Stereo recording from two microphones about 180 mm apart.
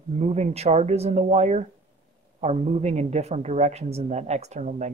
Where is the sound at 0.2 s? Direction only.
35° right (ahead or behind).